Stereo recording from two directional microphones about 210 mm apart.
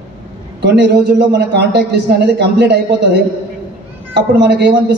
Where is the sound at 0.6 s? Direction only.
55° right (ahead or behind).